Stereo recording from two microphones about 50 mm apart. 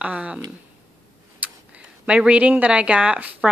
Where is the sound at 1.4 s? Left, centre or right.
Right.